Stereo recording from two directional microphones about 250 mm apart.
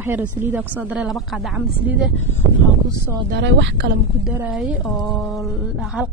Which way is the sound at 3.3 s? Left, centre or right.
Right.